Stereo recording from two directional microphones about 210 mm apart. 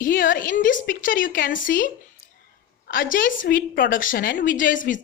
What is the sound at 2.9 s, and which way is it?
Speech, 40° left (ahead or behind).